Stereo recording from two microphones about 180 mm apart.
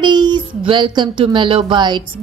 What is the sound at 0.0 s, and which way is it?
Speech, 25° right (ahead or behind).